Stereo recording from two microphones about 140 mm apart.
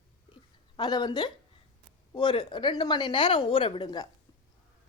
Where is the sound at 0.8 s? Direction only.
30° left (ahead or behind).